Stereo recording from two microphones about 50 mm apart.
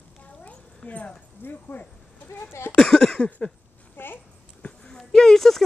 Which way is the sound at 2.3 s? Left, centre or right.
Left.